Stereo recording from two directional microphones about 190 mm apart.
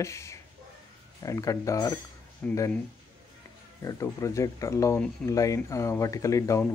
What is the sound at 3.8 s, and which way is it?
Speech, 15° left (ahead or behind).